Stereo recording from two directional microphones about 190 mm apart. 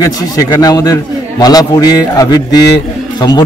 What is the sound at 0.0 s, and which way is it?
A man's voice, 20° left (ahead or behind).